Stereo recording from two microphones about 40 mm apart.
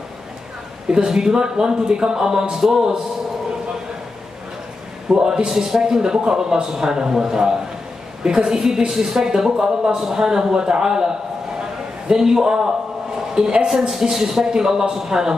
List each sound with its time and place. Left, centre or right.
0.8 s speech: centre
5.1 s a man's voice: right
13.7 s speech: centre